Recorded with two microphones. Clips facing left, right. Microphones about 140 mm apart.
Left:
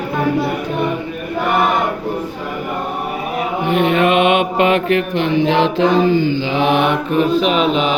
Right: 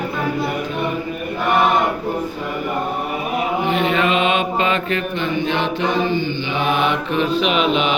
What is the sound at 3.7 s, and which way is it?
Mantra, 55° left (ahead or behind).